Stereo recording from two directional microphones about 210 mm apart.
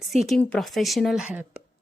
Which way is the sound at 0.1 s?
Centre (ahead or behind).